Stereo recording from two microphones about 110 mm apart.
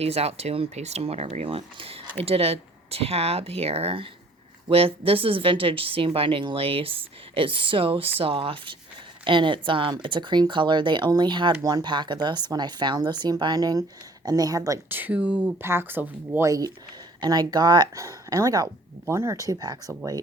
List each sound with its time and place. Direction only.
0.0 s speech: 65° right (ahead or behind); by 14.8 s 30° right (ahead or behind)
14.8 s speech: 15° right (ahead or behind)
16.5 s speech: 35° right (ahead or behind)
18.0 s speech: 30° right (ahead or behind)